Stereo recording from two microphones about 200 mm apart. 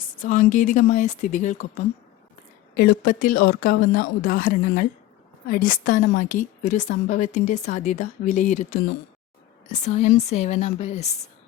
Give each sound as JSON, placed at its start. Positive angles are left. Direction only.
{"t": 0.2, "sound": "a woman's voice", "side_deg": 40}
{"t": 2.7, "sound": "a woman's voice", "side_deg": 50}